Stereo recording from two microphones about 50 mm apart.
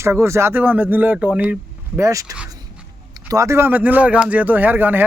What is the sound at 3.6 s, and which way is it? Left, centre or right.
Speech, right.